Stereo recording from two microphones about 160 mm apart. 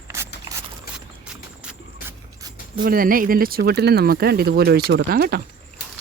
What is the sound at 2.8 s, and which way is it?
Speech, 65° right (ahead or behind).